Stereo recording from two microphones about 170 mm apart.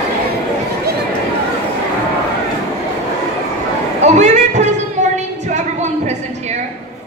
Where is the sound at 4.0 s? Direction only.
40° right (ahead or behind).